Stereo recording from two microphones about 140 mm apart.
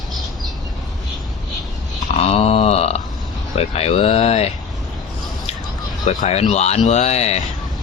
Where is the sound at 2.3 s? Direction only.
45° left (ahead or behind).